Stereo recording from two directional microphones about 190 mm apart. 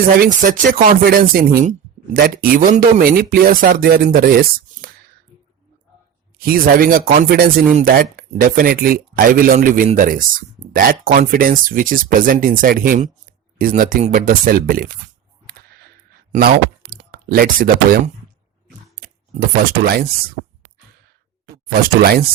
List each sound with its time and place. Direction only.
0.2 s speech: 45° right (ahead or behind)
6.4 s speech: 50° right (ahead or behind)
16.3 s speech: 40° right (ahead or behind)
19.8 s speech: 55° right (ahead or behind)
21.4 s speech: 50° right (ahead or behind)